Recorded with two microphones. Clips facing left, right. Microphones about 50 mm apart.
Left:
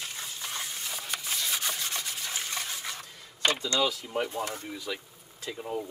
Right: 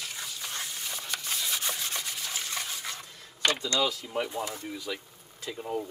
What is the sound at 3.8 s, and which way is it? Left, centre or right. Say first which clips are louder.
Speech: left 1 dB; centre.